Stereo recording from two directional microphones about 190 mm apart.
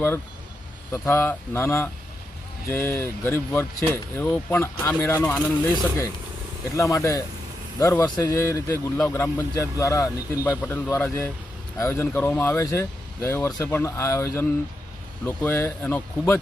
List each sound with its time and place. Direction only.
0.9 s speech: 15° left (ahead or behind)